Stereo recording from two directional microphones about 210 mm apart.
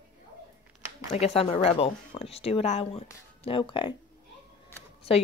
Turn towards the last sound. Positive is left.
turn(degrees=25)  # may be behind; listen again after turning